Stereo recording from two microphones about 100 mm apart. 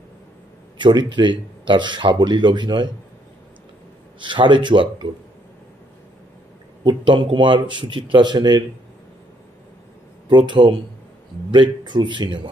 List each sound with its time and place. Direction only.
0.7 s speech: 50° right (ahead or behind)
4.2 s speech: 50° right (ahead or behind)
6.8 s speech: 50° right (ahead or behind)
10.3 s speech: 50° right (ahead or behind)